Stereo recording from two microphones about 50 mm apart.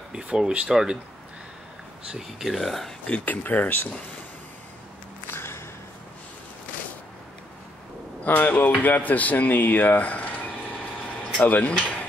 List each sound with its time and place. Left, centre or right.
0.1 s speech: centre
2.4 s speech: centre
3.1 s speech: left
5.2 s a sound: left
8.2 s speech: left
11.4 s speech: left